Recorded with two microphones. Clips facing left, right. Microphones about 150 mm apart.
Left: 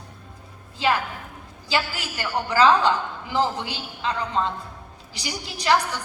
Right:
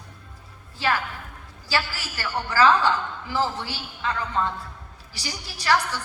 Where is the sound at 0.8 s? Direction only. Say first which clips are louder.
Left 2 dB; 15° left (ahead or behind).